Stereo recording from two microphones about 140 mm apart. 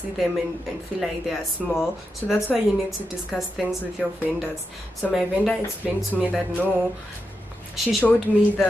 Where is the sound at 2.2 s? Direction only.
15° left (ahead or behind).